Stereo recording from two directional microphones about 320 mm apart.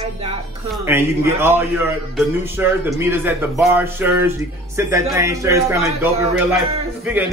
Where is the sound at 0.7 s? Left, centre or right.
Centre.